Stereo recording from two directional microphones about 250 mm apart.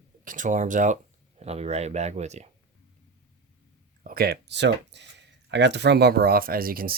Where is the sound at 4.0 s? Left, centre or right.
Right.